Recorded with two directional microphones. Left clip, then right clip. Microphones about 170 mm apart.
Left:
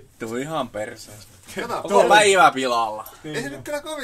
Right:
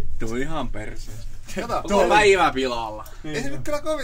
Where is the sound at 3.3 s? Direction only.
40° right (ahead or behind).